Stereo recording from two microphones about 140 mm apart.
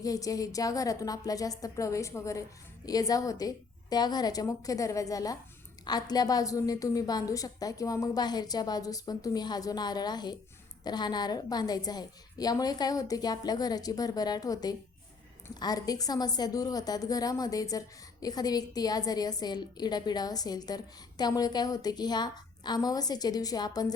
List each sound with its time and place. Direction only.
0.0 s a woman's voice: 25° left (ahead or behind)